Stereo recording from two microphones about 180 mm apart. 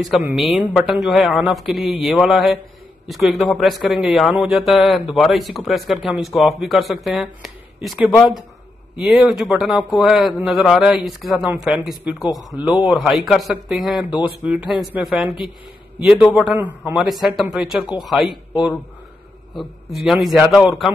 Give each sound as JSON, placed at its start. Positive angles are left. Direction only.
{"t": 0.0, "sound": "a man's voice", "side_deg": -5}